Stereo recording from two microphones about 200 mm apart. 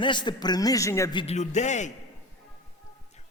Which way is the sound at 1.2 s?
35° left (ahead or behind).